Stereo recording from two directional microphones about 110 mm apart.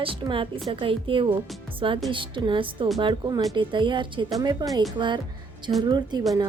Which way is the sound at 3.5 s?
45° right (ahead or behind).